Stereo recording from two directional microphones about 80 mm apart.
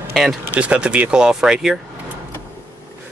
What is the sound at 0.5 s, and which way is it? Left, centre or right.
Speech, centre.